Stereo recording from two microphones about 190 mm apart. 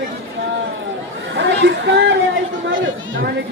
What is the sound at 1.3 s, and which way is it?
Speech, 65° right (ahead or behind).